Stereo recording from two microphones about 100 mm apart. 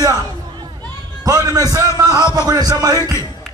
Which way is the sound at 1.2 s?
35° right (ahead or behind).